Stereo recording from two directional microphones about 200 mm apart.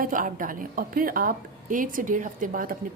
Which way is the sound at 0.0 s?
40° right (ahead or behind).